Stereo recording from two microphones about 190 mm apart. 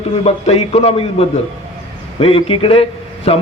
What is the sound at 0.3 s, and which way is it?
A man's voice, 35° left (ahead or behind).